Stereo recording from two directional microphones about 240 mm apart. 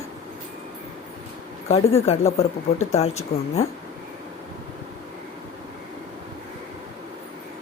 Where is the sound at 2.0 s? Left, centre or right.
Left.